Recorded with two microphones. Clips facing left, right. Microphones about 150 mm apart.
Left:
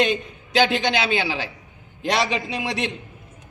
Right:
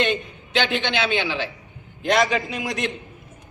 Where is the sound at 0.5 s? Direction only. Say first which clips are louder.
Left 3 dB; 40° left (ahead or behind).